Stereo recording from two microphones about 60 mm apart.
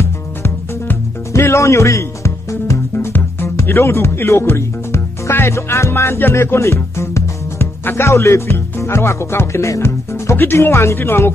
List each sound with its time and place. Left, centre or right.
0.0 s music: left
3.6 s speech: left